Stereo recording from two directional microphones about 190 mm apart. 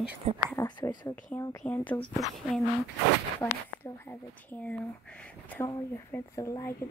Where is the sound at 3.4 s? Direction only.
10° left (ahead or behind).